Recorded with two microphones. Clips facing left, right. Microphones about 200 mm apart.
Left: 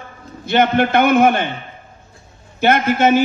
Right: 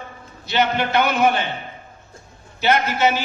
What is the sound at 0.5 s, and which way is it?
A man's voice, 50° left (ahead or behind).